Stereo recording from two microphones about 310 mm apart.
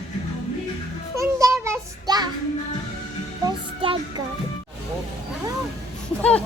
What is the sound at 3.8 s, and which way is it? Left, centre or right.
Music, centre.